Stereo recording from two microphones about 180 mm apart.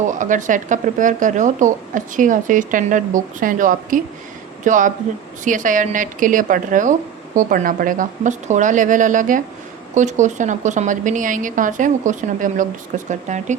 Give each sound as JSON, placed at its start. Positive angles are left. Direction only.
{"t": 0.1, "sound": "speech", "side_deg": -45}